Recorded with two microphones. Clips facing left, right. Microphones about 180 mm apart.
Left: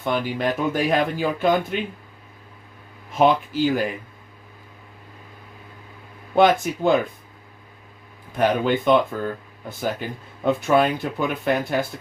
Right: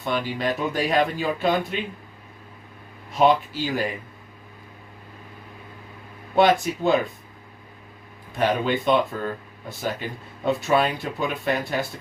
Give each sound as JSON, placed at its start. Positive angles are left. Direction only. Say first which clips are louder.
{"t": 0.0, "sound": "speech", "louder": "left 2 dB", "side_deg": 50}
{"t": 3.2, "sound": "speech", "louder": "left 1 dB", "side_deg": 50}
{"t": 6.3, "sound": "speech", "louder": "left 1 dB", "side_deg": 55}
{"t": 8.4, "sound": "speech", "louder": "left 2 dB", "side_deg": 50}
{"t": 10.4, "sound": "speech", "louder": "left 3 dB", "side_deg": 50}